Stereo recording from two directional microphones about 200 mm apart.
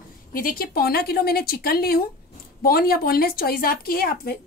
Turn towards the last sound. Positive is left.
turn(degrees=50)  # may be behind; listen again after turning